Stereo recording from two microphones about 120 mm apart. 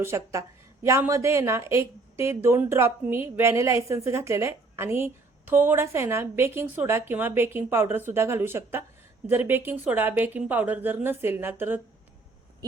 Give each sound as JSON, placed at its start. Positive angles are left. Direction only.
{"t": 0.0, "sound": "a woman's voice", "side_deg": -25}